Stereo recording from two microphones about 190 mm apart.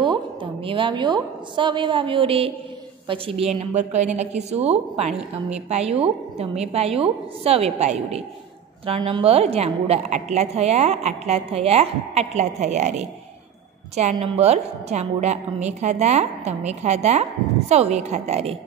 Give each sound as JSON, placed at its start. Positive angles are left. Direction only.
{"t": 0.0, "sound": "a woman's voice", "side_deg": -25}
{"t": 14.1, "sound": "a woman's voice", "side_deg": -30}